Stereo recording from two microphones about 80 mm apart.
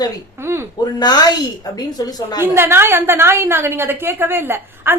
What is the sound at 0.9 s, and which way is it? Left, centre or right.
A woman's voice, left.